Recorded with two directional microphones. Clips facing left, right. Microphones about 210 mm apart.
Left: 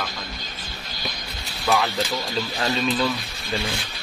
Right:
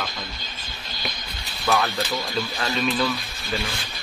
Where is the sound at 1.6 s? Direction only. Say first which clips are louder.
Left 1 dB; centre (ahead or behind).